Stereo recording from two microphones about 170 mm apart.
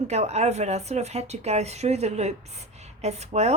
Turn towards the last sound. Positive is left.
turn(degrees=-40)  # may be behind; listen again after turning